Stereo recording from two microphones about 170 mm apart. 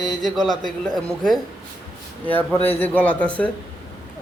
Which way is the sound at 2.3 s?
10° left (ahead or behind).